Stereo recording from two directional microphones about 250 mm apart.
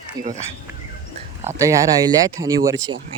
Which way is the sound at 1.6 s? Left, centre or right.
Centre.